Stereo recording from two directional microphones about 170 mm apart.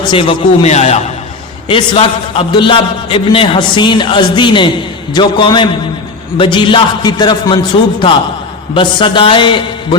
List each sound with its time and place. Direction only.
0.0 s a man's voice: 30° left (ahead or behind)